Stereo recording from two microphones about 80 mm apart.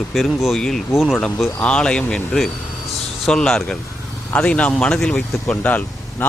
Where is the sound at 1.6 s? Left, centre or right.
Centre.